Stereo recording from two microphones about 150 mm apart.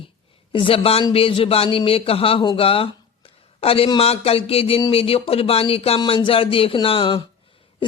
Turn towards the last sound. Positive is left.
turn(degrees=35)  # may be behind; listen again after turning